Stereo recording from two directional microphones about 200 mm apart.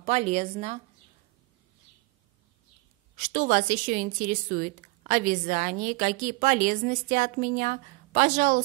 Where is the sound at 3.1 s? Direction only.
40° right (ahead or behind).